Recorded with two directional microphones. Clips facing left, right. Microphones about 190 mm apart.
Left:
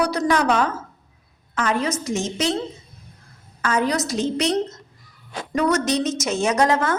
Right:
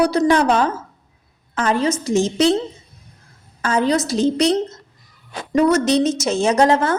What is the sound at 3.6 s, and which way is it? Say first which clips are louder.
A woman's voice: right 4 dB; 30° right (ahead or behind).